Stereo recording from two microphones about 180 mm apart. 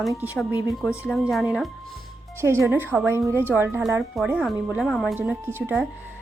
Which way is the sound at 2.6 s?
10° right (ahead or behind).